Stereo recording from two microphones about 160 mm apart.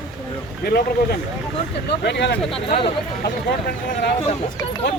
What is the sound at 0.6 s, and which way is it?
Speech, 80° left.